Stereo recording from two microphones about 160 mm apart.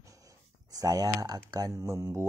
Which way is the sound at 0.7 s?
25° right (ahead or behind).